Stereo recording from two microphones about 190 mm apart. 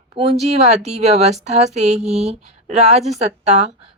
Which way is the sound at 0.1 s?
30° right (ahead or behind).